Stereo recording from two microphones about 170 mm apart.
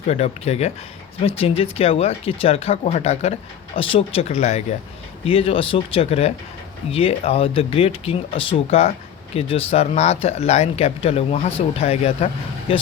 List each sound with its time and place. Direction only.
0.1 s speech: 40° left (ahead or behind)